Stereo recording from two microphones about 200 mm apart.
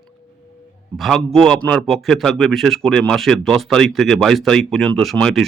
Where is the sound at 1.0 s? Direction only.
Centre (ahead or behind).